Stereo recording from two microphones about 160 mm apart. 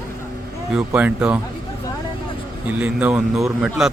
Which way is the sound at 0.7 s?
10° right (ahead or behind).